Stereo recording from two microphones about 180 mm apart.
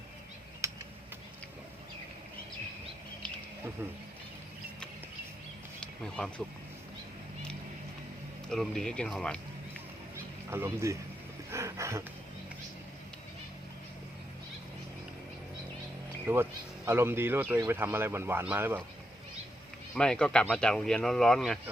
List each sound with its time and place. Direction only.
0.6 s a sound: 15° right (ahead or behind)
5.8 s speech: 5° left (ahead or behind)
8.4 s speech: centre (ahead or behind)
10.5 s speech: 15° right (ahead or behind)
11.5 s dog: 15° right (ahead or behind)
16.2 s speech: 15° right (ahead or behind)
19.9 s speech: 5° left (ahead or behind)